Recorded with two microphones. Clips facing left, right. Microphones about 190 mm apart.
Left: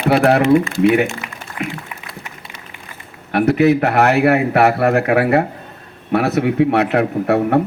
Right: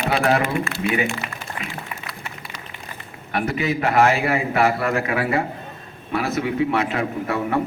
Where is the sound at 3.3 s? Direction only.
65° left (ahead or behind).